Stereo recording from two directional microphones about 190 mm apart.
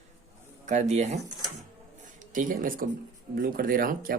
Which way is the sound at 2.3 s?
45° right (ahead or behind).